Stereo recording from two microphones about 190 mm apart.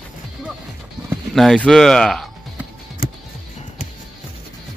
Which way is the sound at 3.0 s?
50° left (ahead or behind).